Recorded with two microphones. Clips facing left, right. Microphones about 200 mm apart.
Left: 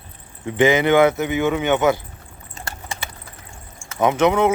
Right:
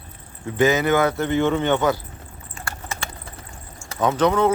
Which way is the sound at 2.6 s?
20° left (ahead or behind).